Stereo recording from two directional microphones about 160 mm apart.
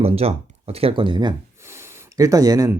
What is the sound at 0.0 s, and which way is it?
Speech, 40° right (ahead or behind).